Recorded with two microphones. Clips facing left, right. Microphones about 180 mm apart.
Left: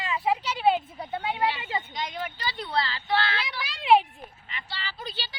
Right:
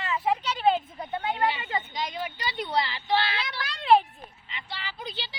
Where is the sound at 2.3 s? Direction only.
20° right (ahead or behind).